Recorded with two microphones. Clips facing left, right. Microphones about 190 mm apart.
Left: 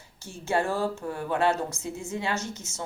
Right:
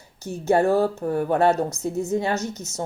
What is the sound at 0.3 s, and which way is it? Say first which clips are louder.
Speech: right 8 dB; 40° right (ahead or behind).